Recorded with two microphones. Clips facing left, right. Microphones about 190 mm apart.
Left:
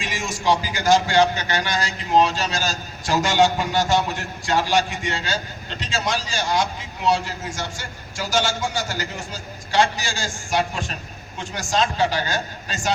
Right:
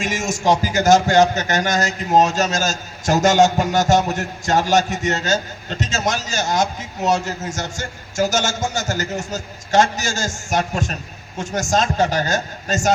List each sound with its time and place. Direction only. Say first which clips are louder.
0.0 s a man's voice: right 5 dB; 45° right (ahead or behind)